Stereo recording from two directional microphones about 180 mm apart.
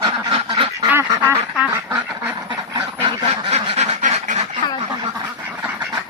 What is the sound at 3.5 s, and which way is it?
Duck, 35° right (ahead or behind).